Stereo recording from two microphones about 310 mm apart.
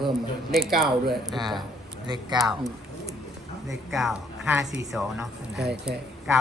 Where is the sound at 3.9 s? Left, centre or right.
Centre.